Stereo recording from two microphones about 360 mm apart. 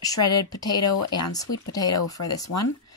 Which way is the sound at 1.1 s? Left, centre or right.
Centre.